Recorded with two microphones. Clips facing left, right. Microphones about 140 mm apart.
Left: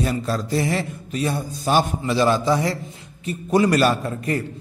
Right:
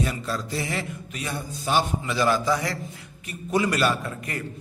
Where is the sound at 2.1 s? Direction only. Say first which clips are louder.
Left 4 dB; 25° left (ahead or behind).